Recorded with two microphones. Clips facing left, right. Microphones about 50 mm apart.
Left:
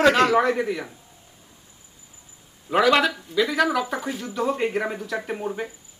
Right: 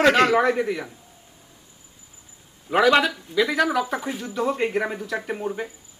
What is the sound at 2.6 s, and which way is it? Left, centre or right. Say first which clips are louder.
Speech: right 1 dB; centre.